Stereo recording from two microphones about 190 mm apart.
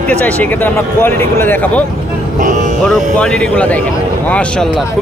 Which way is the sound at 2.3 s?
40° right (ahead or behind).